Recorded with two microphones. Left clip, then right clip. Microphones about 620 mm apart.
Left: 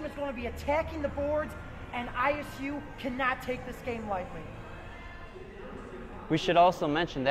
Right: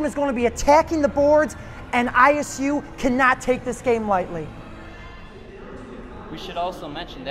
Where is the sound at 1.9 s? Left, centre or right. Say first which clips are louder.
Right 14 dB; right.